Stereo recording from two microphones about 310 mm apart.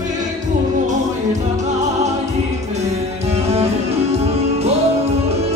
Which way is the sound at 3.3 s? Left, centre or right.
Centre.